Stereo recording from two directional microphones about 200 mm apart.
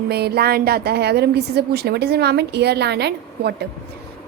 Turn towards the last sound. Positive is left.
turn(degrees=-55)  # may be behind; listen again after turning